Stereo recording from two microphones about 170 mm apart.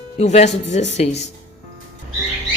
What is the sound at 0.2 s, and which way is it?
Speech, 40° left (ahead or behind).